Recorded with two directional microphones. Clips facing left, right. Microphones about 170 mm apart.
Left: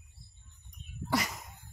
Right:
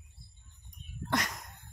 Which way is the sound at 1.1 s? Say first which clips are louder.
Left 1 dB; 5° left (ahead or behind).